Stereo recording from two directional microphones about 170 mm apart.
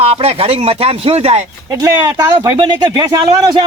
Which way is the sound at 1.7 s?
20° right (ahead or behind).